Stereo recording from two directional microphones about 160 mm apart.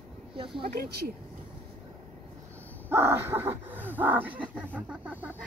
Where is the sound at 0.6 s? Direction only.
75° right (ahead or behind).